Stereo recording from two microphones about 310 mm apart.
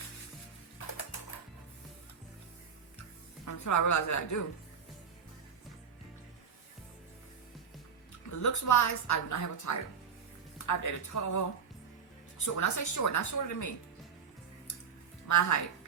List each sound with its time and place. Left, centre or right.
3.4 s a woman's voice: left
8.3 s a woman's voice: left
12.5 s a woman's voice: left
15.3 s speech: left